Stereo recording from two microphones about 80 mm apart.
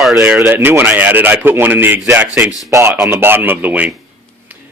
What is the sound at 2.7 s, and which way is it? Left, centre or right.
Speech, right.